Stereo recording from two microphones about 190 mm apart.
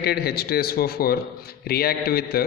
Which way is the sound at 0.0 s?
55° left (ahead or behind).